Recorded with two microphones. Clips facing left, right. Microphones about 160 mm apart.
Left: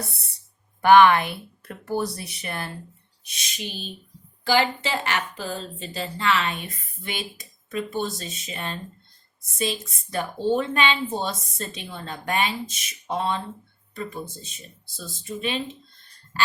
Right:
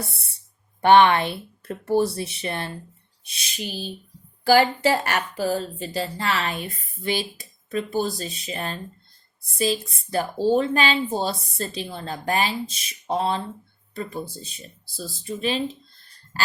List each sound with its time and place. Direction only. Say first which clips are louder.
0.0 s a woman's voice: right 1 dB; 30° right (ahead or behind)